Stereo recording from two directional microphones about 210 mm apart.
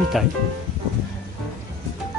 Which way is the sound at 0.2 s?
Centre (ahead or behind).